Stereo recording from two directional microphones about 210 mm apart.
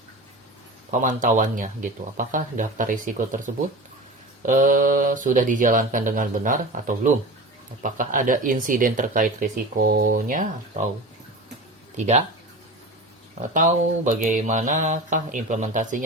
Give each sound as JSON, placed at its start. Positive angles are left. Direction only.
{"t": 0.9, "sound": "speech", "side_deg": -40}
{"t": 11.9, "sound": "speech", "side_deg": -30}
{"t": 13.4, "sound": "speech", "side_deg": -35}